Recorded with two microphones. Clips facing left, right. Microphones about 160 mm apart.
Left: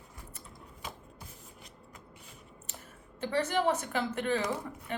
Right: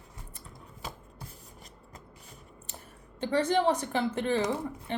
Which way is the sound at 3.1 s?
30° right (ahead or behind).